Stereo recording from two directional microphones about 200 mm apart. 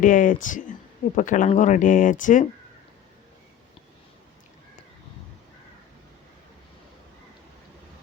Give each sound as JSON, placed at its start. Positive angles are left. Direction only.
{"t": 0.0, "sound": "speech", "side_deg": 40}